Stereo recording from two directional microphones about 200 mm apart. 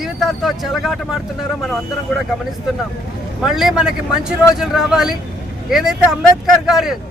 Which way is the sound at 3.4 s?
Centre (ahead or behind).